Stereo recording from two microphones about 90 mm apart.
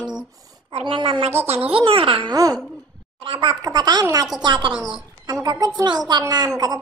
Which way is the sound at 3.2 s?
70° right (ahead or behind).